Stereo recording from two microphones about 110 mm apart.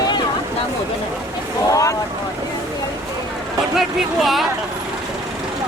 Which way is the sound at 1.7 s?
30° left (ahead or behind).